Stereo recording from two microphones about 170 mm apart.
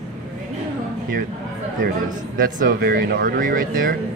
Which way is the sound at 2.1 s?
50° right (ahead or behind).